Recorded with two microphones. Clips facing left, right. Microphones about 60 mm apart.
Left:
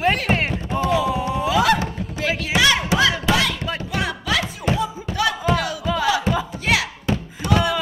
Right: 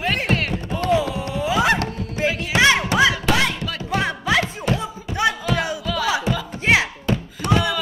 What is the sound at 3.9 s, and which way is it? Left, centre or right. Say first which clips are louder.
Music: right 4 dB; right.